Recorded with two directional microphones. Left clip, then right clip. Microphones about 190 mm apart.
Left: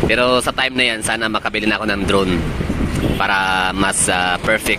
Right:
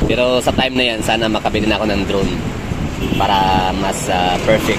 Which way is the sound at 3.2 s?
20° left (ahead or behind).